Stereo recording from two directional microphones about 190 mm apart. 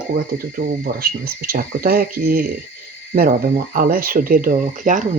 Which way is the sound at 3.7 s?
50° right (ahead or behind).